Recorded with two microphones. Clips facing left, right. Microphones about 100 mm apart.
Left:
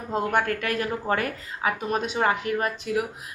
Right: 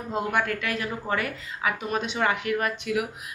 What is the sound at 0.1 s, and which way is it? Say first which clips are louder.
A woman's voice: left 2 dB; 45° left (ahead or behind).